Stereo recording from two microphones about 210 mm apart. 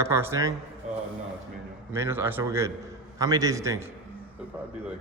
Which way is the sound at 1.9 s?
10° right (ahead or behind).